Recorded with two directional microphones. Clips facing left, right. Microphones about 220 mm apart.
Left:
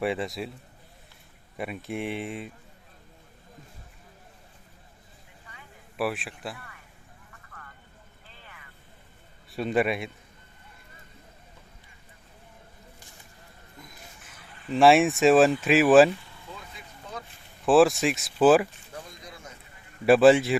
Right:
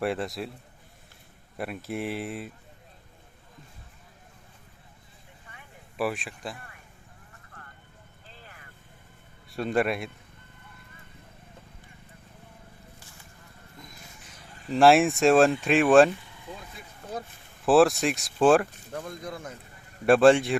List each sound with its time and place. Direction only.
0.0 s speech: centre (ahead or behind)
1.5 s speech: centre (ahead or behind)
6.0 s speech: 5° left (ahead or behind)
9.5 s speech: centre (ahead or behind)
14.7 s speech: centre (ahead or behind)
17.7 s speech: centre (ahead or behind)
18.9 s speech: 50° right (ahead or behind)
20.1 s speech: 5° left (ahead or behind)